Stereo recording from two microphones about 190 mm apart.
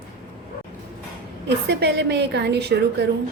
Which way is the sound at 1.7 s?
60° right (ahead or behind).